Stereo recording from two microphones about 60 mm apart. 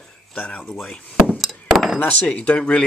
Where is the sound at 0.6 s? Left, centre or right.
Centre.